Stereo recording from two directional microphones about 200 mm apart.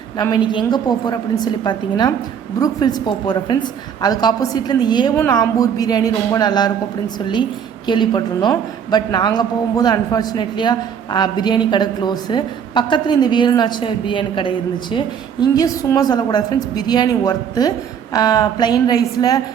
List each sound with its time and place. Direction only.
0.2 s a woman's voice: 20° left (ahead or behind)
5.1 s a woman's voice: 10° left (ahead or behind)
7.9 s a woman's voice: 20° left (ahead or behind)